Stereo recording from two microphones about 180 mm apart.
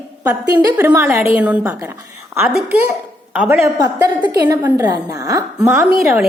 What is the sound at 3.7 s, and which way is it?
A woman's voice, 20° right (ahead or behind).